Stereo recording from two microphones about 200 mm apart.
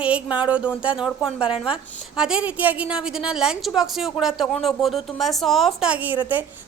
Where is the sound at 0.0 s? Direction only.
5° right (ahead or behind).